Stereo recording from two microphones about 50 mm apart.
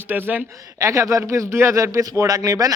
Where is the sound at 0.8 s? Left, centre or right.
Right.